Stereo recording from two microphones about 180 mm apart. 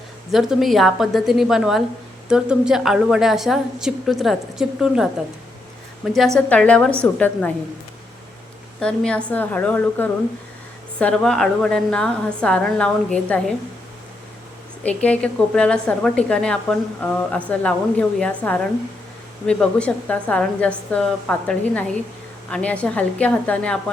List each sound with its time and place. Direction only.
0.3 s a woman's voice: centre (ahead or behind)
6.1 s a woman's voice: centre (ahead or behind)
8.8 s a woman's voice: 5° left (ahead or behind)
14.8 s a woman's voice: 5° left (ahead or behind)